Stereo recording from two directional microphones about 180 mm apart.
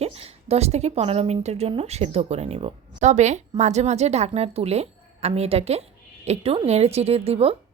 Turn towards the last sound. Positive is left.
turn(degrees=-35)  # may be behind; listen again after turning